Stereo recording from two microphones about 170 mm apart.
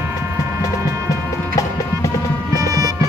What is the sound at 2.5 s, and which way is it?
Music, 20° right (ahead or behind).